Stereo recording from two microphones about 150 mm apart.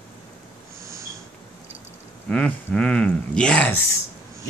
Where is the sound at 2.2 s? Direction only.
10° left (ahead or behind).